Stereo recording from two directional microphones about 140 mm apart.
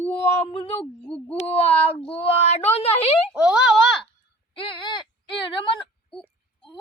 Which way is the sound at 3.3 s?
5° right (ahead or behind).